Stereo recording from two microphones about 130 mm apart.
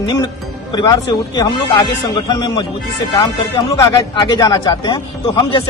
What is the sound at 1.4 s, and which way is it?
Speech, 35° left (ahead or behind).